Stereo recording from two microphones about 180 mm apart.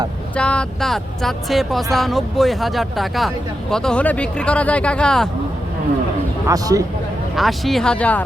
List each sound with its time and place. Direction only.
0.3 s speech: 5° left (ahead or behind)
6.5 s speech: 20° right (ahead or behind)
7.3 s speech: centre (ahead or behind)